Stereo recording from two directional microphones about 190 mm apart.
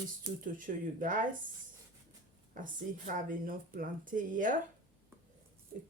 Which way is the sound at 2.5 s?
45° right (ahead or behind).